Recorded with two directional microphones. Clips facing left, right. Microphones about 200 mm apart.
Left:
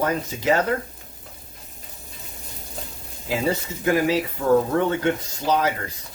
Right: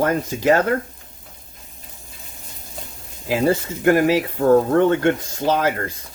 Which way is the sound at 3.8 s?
55° right (ahead or behind).